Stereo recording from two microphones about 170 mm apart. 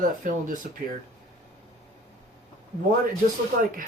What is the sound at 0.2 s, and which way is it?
Speech, 55° right (ahead or behind).